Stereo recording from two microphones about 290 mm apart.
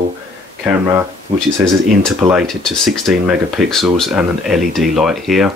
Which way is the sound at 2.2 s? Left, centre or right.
Centre.